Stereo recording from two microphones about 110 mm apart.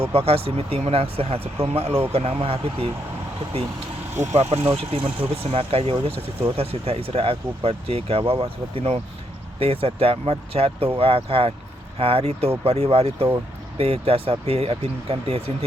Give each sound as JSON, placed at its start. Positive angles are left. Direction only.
{"t": 0.0, "sound": "speech", "side_deg": -65}
{"t": 4.1, "sound": "speech", "side_deg": -90}